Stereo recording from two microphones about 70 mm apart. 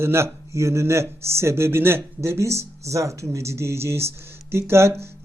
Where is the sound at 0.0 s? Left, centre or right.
Right.